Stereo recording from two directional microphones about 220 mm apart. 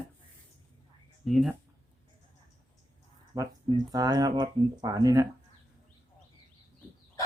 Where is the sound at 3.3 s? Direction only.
15° right (ahead or behind).